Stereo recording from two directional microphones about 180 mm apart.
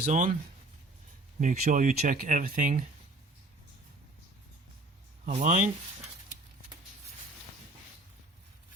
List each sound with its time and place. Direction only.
0.0 s speech: 45° right (ahead or behind)
1.4 s speech: 45° right (ahead or behind)
5.2 s speech: 40° right (ahead or behind)